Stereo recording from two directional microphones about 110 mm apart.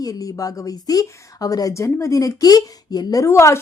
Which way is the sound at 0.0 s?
35° left (ahead or behind).